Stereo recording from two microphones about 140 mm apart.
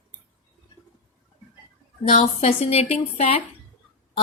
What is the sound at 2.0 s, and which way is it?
A woman's voice, 50° left (ahead or behind).